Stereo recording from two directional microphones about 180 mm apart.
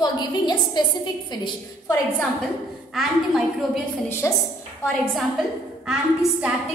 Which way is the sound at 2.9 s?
Centre (ahead or behind).